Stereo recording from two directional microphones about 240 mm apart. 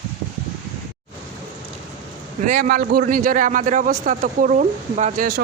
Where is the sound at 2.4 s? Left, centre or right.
Right.